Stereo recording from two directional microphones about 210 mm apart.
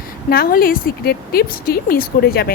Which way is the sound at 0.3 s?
45° left (ahead or behind).